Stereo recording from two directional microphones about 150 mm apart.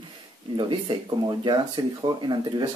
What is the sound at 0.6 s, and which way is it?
Speech, 30° right (ahead or behind).